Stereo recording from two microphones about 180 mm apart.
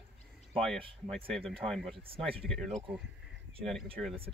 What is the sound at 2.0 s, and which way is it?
Speech, 30° right (ahead or behind).